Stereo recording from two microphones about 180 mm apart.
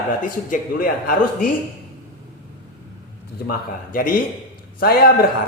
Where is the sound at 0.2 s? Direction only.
50° left (ahead or behind).